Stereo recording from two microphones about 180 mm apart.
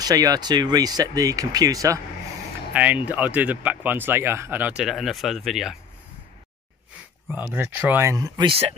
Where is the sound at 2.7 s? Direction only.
10° right (ahead or behind).